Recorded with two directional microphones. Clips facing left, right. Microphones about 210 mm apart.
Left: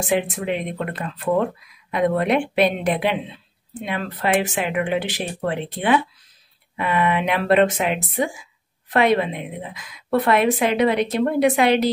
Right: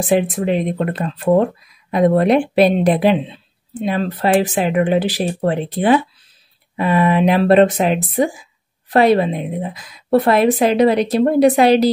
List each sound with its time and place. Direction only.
0.0 s speech: 35° right (ahead or behind)